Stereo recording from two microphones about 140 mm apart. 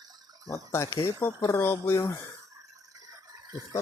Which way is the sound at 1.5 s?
15° left (ahead or behind).